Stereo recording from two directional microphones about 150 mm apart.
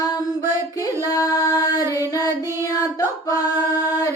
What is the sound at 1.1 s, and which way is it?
Music, 25° left (ahead or behind).